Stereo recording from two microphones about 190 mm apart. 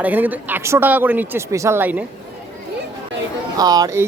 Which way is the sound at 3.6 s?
20° right (ahead or behind).